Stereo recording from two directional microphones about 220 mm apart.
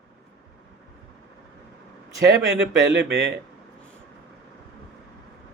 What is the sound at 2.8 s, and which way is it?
Speech, 45° right (ahead or behind).